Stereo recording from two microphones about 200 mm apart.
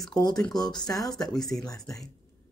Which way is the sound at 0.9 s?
20° left (ahead or behind).